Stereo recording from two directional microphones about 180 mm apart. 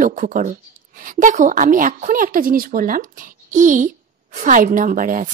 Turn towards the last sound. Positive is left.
turn(degrees=-50)  # may be behind; listen again after turning